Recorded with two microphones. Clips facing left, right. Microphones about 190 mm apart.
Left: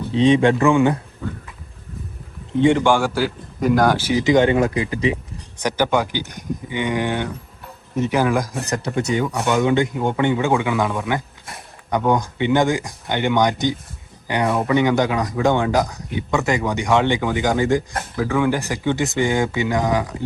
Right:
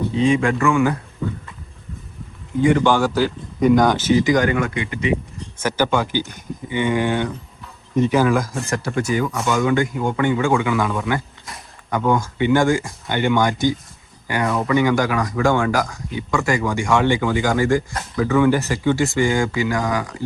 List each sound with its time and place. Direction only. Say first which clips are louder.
0.1 s speech: left 4 dB; 30° left (ahead or behind)
0.6 s speech: left 2 dB; 20° left (ahead or behind)
2.5 s speech: left 1 dB; 30° left (ahead or behind)
2.7 s speech: right 1 dB; 15° left (ahead or behind); by 5.1 s 35° left (ahead or behind)
5.5 s speech: even; 15° left (ahead or behind)